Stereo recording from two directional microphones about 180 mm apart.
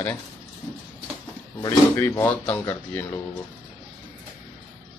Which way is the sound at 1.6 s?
15° left (ahead or behind).